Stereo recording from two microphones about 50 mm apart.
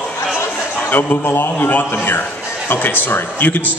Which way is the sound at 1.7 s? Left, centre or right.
Left.